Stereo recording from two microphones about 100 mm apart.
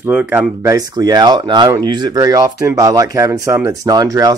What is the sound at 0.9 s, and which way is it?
Speech, 40° right (ahead or behind).